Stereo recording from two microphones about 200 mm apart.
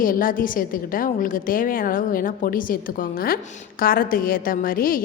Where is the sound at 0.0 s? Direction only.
45° left (ahead or behind).